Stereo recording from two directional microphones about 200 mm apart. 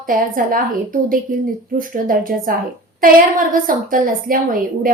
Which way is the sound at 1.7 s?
45° right (ahead or behind).